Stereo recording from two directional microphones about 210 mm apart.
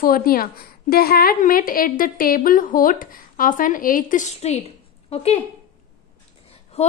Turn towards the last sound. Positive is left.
turn(degrees=30)  # may be behind; listen again after turning